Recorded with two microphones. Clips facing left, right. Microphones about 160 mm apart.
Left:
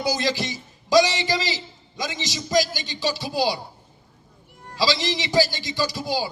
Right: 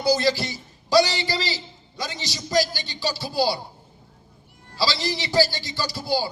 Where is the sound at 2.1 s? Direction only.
20° left (ahead or behind).